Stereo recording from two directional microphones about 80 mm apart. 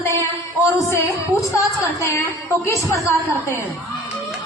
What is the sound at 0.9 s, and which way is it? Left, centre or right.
A woman's voice, left.